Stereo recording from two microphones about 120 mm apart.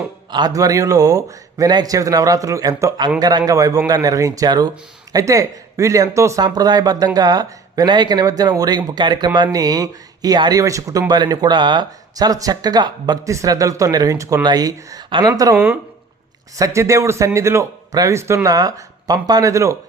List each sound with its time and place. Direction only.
0.3 s a man's voice: 35° right (ahead or behind)
15.5 s speech: 10° right (ahead or behind)
16.6 s a man's voice: 25° right (ahead or behind)